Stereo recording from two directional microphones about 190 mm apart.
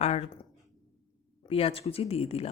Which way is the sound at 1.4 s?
30° left (ahead or behind).